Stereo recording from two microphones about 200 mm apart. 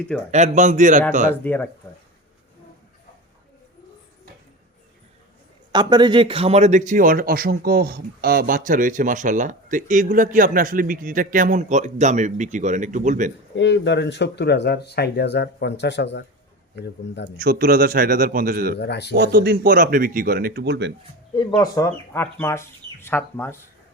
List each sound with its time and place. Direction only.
0.3 s speech: 35° right (ahead or behind)
1.3 s speech: 10° left (ahead or behind)
5.7 s speech: 20° right (ahead or behind); by 13.3 s 40° right (ahead or behind)
13.6 s speech: 65° left (ahead or behind)
17.4 s speech: 45° right (ahead or behind)
18.8 s speech: 55° left (ahead or behind)
19.1 s speech: 50° right (ahead or behind)
21.3 s speech: 20° left (ahead or behind)